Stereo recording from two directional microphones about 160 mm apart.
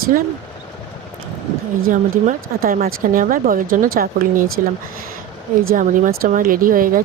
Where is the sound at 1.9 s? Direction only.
55° right (ahead or behind).